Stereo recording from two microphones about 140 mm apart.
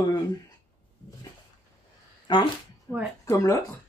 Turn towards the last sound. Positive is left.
turn(degrees=20)  # may be behind; listen again after turning